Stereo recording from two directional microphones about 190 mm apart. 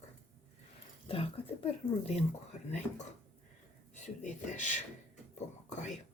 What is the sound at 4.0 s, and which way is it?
Speech, 40° left (ahead or behind).